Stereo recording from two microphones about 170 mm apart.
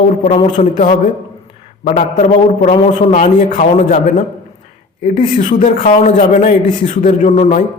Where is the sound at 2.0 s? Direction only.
45° left (ahead or behind).